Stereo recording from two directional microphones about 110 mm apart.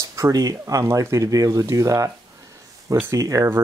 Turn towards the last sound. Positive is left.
turn(degrees=-25)  # may be behind; listen again after turning